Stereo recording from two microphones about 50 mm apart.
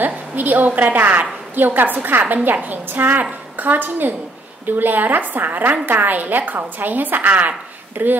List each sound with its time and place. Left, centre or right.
0.0 s a woman's voice: right